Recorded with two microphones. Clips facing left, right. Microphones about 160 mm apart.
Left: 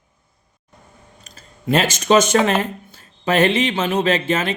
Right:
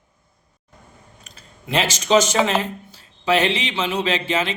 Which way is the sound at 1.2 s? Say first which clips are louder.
Left 14 dB; 45° left (ahead or behind).